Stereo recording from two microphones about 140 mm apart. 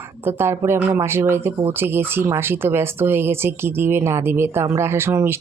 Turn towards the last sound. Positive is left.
turn(degrees=-15)  # may be behind; listen again after turning